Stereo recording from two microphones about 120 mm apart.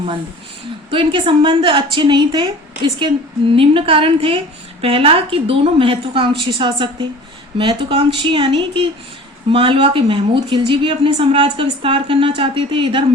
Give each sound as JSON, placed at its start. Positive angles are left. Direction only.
{"t": 0.9, "sound": "a woman's voice", "side_deg": -45}